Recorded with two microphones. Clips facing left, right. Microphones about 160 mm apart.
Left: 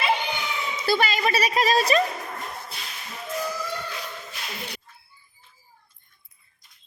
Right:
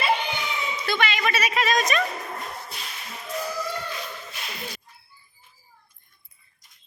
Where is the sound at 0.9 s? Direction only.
35° left (ahead or behind).